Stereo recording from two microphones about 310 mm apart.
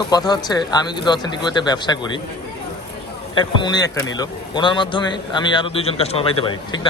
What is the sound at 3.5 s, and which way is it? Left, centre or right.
A man's voice, centre.